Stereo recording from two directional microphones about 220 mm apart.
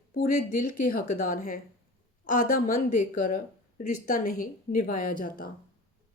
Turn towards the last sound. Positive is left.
turn(degrees=40)  # may be behind; listen again after turning